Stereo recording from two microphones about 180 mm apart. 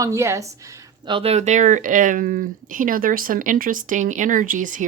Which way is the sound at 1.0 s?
30° right (ahead or behind).